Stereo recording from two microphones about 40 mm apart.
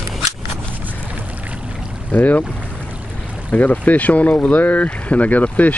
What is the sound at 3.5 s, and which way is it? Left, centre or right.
Speech, left.